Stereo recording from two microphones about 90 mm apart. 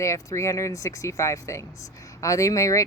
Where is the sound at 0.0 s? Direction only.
35° left (ahead or behind).